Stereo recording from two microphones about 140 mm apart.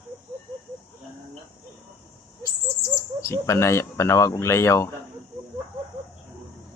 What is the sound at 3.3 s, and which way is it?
Speech, 20° left (ahead or behind).